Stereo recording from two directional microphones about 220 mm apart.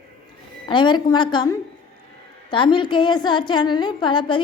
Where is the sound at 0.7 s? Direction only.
20° left (ahead or behind).